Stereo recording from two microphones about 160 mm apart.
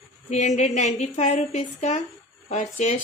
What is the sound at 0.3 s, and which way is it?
A woman's voice, 45° left (ahead or behind).